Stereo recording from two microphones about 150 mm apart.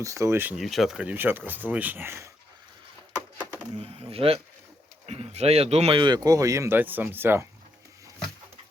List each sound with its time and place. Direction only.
0.0 s speech: 20° right (ahead or behind)
0.5 s speech: centre (ahead or behind); by 2.3 s 15° right (ahead or behind)
3.2 s a sound: 15° right (ahead or behind)
3.8 s speech: 40° right (ahead or behind)
6.0 s speech: 30° right (ahead or behind)